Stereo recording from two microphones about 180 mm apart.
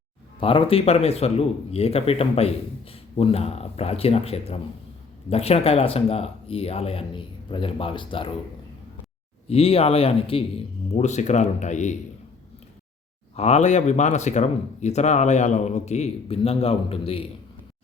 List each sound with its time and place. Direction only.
0.3 s speech: 30° left (ahead or behind)
9.5 s speech: 35° left (ahead or behind)
13.3 s speech: 35° left (ahead or behind)